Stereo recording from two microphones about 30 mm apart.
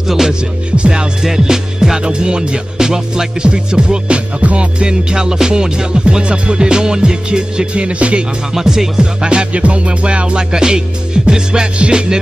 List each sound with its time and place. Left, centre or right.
0.0 s music: centre
0.7 s music: right
1.2 s speech: centre
2.8 s music: centre
3.4 s music: right
4.4 s music: right
4.7 s speech: right
6.2 s speech: right
7.7 s music: right
8.5 s speech: centre
9.5 s music: right
10.5 s speech: right